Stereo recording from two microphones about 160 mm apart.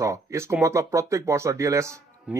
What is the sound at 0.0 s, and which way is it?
Speech, 20° right (ahead or behind).